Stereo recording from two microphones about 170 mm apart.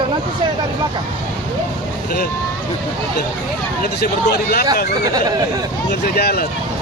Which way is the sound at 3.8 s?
70° left (ahead or behind).